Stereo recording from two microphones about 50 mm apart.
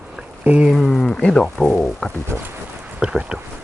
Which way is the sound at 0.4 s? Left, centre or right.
Right.